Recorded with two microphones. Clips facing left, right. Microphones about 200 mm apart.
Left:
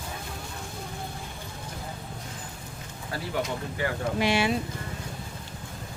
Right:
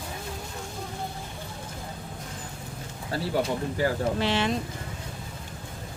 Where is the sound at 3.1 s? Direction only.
30° right (ahead or behind).